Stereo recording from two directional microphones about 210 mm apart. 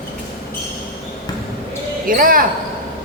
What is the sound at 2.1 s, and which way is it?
Speech, 40° right (ahead or behind).